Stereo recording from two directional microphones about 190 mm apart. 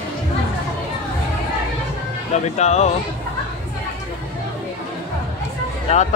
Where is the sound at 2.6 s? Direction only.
35° left (ahead or behind).